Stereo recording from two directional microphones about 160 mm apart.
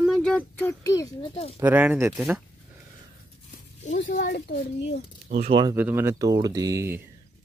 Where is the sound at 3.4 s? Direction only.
50° left (ahead or behind).